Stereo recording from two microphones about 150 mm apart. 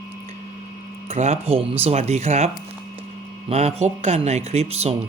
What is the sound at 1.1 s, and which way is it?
Speech, 45° right (ahead or behind).